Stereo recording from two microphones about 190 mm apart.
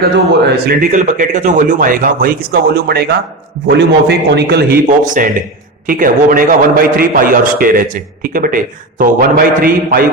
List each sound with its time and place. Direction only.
0.0 s a man's voice: 55° right (ahead or behind)